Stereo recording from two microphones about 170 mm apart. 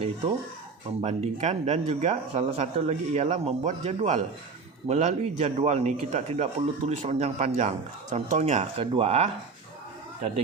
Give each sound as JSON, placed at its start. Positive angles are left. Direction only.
{"t": 1.0, "sound": "speech", "side_deg": -45}